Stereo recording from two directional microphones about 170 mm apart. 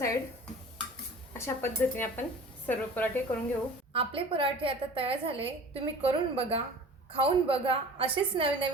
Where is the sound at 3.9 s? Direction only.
35° right (ahead or behind).